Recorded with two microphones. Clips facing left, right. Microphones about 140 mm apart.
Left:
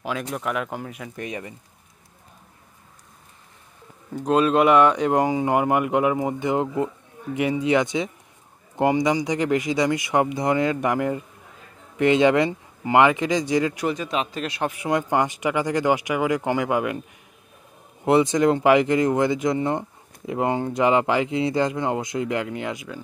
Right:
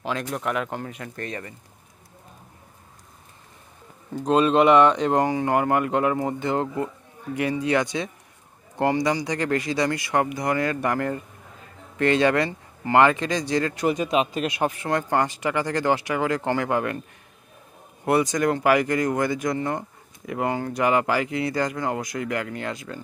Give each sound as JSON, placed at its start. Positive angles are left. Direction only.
{"t": 0.0, "sound": "speech", "side_deg": 0}
{"t": 4.1, "sound": "speech", "side_deg": 5}
{"t": 13.9, "sound": "speech", "side_deg": -15}
{"t": 14.7, "sound": "speech", "side_deg": 15}
{"t": 18.0, "sound": "speech", "side_deg": 25}